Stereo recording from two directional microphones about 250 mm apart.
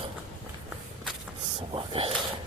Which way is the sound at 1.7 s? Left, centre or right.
Right.